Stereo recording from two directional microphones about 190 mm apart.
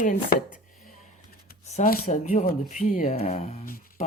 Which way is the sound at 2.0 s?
40° left (ahead or behind).